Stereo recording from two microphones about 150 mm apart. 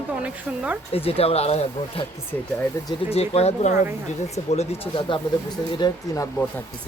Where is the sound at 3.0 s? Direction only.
45° left (ahead or behind).